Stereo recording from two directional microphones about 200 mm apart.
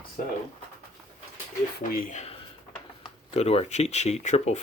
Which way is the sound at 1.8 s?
40° left (ahead or behind).